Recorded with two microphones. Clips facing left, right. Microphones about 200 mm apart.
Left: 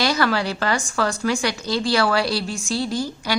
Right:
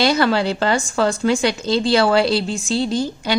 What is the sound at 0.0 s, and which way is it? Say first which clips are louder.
A woman's voice: right 4 dB; 25° right (ahead or behind).